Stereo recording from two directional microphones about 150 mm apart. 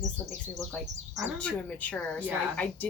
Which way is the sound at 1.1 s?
5° left (ahead or behind).